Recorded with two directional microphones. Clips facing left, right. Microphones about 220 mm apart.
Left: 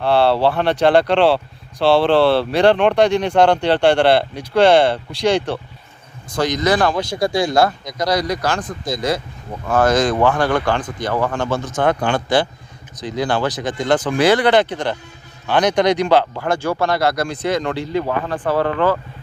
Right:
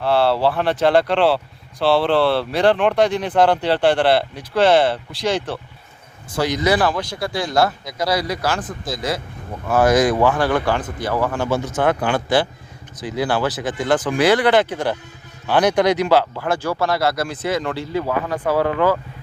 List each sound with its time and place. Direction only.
0.0 s speech: centre (ahead or behind)
1.9 s speech: 30° left (ahead or behind)
2.5 s speech: centre (ahead or behind)
7.1 s speech: 15° left (ahead or behind)
7.5 s speech: 5° right (ahead or behind)
14.2 s speech: 25° left (ahead or behind)
14.5 s speech: 5° right (ahead or behind)